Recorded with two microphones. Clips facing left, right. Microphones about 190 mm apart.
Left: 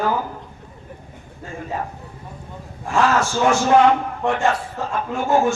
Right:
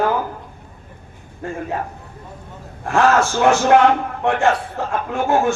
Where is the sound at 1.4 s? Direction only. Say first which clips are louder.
Right 7 dB; 60° right (ahead or behind).